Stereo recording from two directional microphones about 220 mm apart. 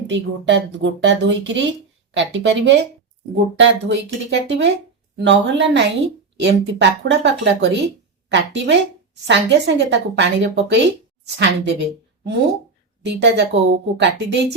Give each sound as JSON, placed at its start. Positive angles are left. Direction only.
{"t": 0.1, "sound": "a woman's voice", "side_deg": -55}